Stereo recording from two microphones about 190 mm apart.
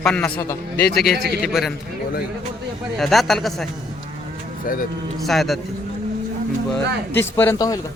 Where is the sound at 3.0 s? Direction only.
Centre (ahead or behind).